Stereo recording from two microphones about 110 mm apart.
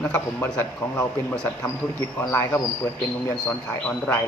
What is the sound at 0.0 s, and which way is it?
A man's voice, 15° left (ahead or behind).